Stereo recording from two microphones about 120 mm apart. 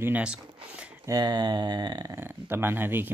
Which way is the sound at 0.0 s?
10° right (ahead or behind).